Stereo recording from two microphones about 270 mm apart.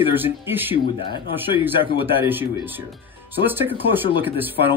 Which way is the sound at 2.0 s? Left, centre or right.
Centre.